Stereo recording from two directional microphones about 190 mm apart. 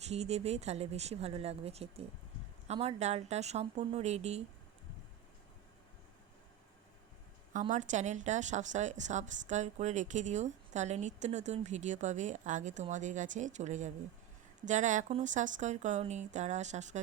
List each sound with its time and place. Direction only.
0.1 s a woman's voice: 35° right (ahead or behind)
7.7 s a woman's voice: 40° right (ahead or behind)